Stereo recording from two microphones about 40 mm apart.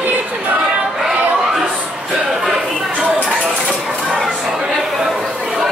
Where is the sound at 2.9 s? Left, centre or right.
Right.